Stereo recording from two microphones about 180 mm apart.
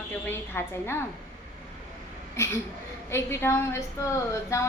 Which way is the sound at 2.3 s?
15° left (ahead or behind).